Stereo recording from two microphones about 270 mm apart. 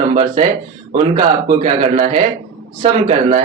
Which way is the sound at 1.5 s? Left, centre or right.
Right.